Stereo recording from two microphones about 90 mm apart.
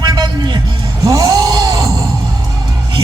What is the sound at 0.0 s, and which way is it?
Music, 55° right (ahead or behind).